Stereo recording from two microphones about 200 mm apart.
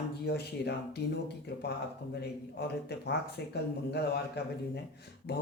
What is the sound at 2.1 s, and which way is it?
Speech, 55° left (ahead or behind).